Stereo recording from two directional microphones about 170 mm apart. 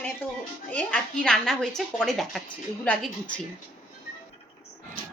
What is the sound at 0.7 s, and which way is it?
A woman's voice, 10° left (ahead or behind).